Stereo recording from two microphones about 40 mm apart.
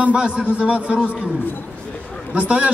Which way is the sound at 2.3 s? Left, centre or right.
Right.